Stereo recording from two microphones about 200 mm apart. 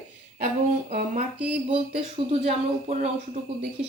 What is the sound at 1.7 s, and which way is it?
Speech, 30° right (ahead or behind).